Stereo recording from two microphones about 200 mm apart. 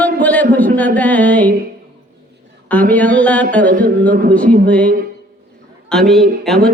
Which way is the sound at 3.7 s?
40° right (ahead or behind).